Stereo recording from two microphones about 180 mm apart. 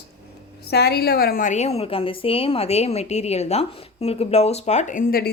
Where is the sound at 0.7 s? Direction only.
65° left (ahead or behind).